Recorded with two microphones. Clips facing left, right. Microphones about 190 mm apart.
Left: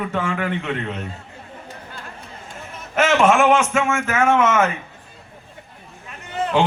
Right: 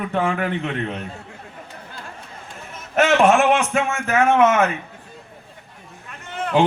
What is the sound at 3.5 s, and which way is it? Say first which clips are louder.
A man's voice: left 2 dB; 35° right (ahead or behind).